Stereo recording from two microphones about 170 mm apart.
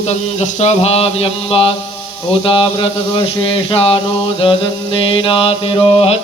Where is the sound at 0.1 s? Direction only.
40° left (ahead or behind).